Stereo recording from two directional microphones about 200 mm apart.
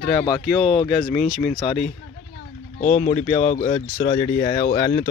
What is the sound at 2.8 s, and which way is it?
Speech, 40° left (ahead or behind).